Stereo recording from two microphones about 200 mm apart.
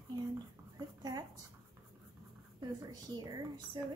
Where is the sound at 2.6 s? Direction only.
20° right (ahead or behind).